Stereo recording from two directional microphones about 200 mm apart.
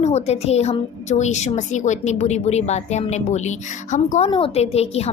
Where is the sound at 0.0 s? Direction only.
35° left (ahead or behind).